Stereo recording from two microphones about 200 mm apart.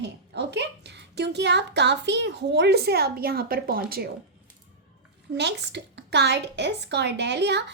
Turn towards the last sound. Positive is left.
turn(degrees=-60)  # may be behind; listen again after turning